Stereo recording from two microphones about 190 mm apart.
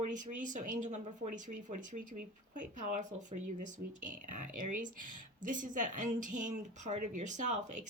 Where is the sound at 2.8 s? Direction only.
40° right (ahead or behind).